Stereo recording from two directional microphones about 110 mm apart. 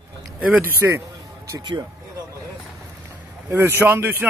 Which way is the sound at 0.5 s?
20° right (ahead or behind).